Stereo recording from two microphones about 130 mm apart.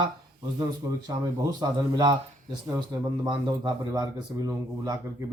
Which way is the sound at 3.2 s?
30° right (ahead or behind).